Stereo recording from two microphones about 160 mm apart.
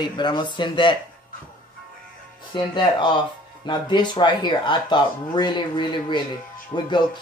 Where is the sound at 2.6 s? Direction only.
30° left (ahead or behind).